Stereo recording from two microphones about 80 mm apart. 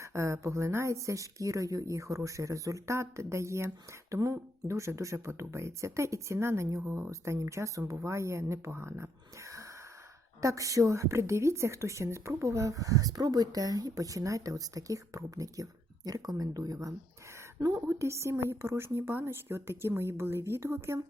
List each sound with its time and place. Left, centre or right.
0.0 s a woman's voice: right
17.7 s speech: right